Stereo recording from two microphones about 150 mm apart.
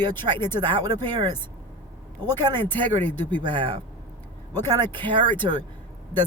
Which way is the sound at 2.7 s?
10° left (ahead or behind).